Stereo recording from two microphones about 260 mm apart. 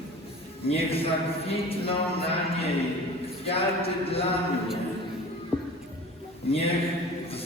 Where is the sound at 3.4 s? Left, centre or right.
Left.